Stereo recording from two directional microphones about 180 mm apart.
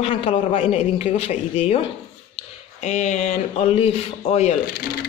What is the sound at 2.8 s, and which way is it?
Speech, 40° left (ahead or behind).